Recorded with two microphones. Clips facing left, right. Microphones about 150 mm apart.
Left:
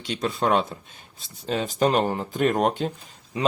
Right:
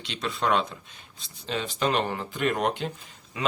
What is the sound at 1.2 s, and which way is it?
Speech, 45° left (ahead or behind).